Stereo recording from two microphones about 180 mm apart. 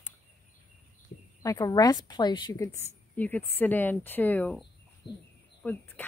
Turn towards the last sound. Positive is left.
turn(degrees=10)  # may be behind; listen again after turning